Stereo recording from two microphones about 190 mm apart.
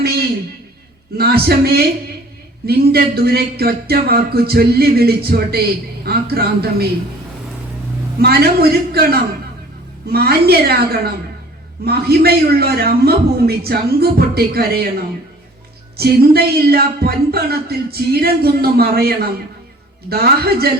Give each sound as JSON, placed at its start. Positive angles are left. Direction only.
{"t": 0.0, "sound": "a sound", "side_deg": -55}
{"t": 1.1, "sound": "a man's voice", "side_deg": -55}
{"t": 8.2, "sound": "a man's voice", "side_deg": -55}